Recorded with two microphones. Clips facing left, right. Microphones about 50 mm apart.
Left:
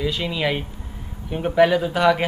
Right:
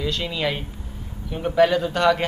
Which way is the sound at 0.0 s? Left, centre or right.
Centre.